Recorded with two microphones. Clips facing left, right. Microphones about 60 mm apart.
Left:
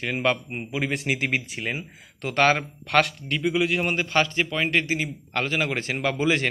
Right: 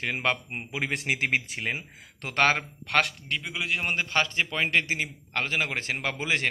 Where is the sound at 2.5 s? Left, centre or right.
Centre.